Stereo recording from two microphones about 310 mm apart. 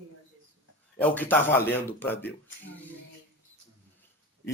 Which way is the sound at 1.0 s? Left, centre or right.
Centre.